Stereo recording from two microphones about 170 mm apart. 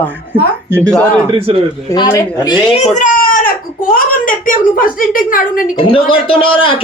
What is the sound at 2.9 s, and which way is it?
Speech, 50° left (ahead or behind).